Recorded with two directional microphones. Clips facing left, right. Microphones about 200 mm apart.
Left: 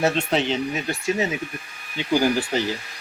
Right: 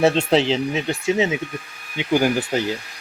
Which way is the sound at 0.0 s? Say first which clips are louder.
Right 5 dB; 30° right (ahead or behind).